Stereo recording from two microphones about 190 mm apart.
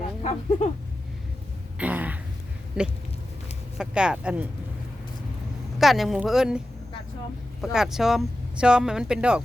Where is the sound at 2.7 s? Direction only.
5° right (ahead or behind).